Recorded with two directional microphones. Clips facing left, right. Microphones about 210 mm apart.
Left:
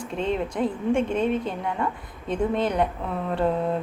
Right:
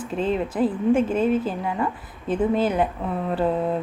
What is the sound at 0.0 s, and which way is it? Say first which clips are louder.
Speech: right 2 dB; 5° right (ahead or behind).